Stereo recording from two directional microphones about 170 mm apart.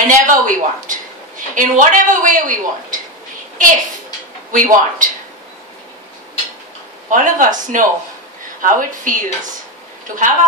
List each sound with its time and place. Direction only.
0.0 s a woman's voice: 50° right (ahead or behind)
7.1 s a woman's voice: 50° right (ahead or behind)